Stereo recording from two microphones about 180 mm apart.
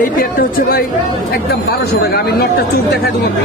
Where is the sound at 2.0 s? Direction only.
65° left (ahead or behind).